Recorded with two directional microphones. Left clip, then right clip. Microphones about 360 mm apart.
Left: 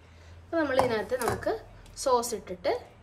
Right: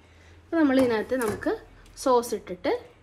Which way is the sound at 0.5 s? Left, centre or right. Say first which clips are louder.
Right 3 dB; centre.